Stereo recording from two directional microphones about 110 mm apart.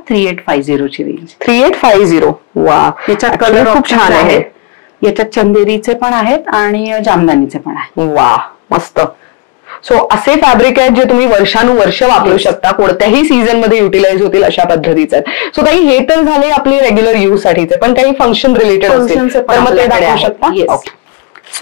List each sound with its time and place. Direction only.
0.4 s speech: 20° left (ahead or behind)
7.2 s speech: 30° left (ahead or behind)
10.0 s speech: 20° left (ahead or behind)